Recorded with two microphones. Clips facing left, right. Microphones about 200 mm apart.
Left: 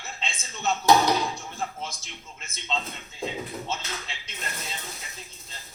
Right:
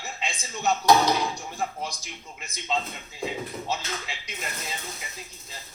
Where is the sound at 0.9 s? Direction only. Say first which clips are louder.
Even; centre (ahead or behind).